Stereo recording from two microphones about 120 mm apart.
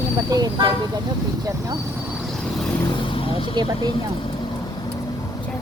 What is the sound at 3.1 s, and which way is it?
Vehicle, 45° left (ahead or behind).